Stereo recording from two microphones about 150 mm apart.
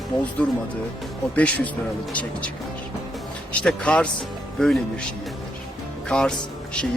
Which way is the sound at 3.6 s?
5° left (ahead or behind).